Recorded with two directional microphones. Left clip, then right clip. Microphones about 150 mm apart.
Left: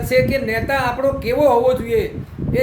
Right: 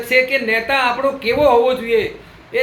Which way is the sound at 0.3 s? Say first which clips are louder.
Right 3 dB; 20° left (ahead or behind).